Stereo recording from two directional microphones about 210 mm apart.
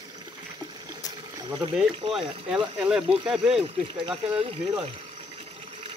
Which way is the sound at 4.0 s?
25° right (ahead or behind).